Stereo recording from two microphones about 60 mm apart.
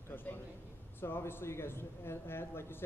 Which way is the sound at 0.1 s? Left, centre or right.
Left.